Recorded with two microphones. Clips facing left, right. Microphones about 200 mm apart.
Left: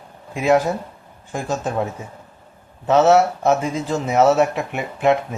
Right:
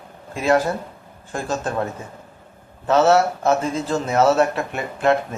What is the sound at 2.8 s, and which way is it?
A man's voice, 15° left (ahead or behind).